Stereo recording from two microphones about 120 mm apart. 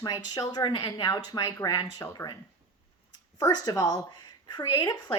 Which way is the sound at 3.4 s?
30° left (ahead or behind).